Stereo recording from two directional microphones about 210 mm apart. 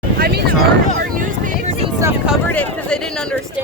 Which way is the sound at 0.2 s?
50° right (ahead or behind).